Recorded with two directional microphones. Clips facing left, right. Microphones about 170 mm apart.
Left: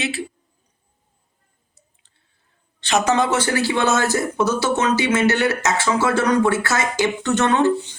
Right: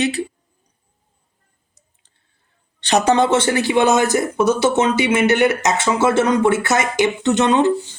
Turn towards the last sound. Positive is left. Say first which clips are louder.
# right 2 dB
turn(degrees=-20)  # may be behind; listen again after turning